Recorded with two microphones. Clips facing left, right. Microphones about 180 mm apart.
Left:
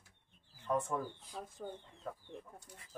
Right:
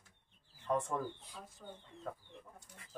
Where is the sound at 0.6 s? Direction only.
5° left (ahead or behind).